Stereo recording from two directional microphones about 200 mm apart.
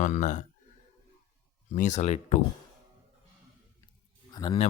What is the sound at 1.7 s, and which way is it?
Speech, 35° left (ahead or behind).